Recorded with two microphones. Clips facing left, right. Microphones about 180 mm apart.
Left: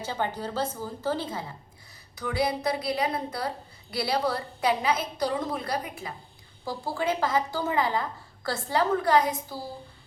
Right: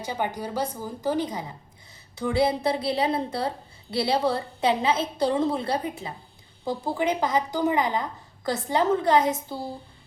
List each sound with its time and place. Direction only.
0.0 s a woman's voice: 15° right (ahead or behind)
2.1 s a woman's voice: 25° right (ahead or behind)